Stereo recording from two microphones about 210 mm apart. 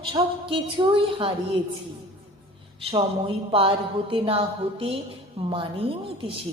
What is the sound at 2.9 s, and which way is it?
A woman's voice, 25° right (ahead or behind).